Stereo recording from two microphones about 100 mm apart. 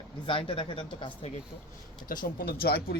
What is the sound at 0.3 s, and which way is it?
Speech, 60° left (ahead or behind).